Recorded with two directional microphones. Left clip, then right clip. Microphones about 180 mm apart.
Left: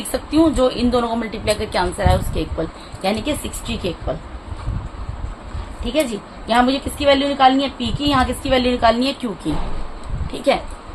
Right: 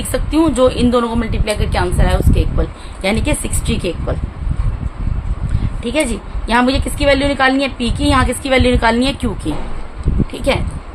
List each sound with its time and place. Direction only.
0.1 s a woman's voice: 30° right (ahead or behind)
3.0 s a woman's voice: 40° right (ahead or behind)
5.8 s a woman's voice: 40° right (ahead or behind)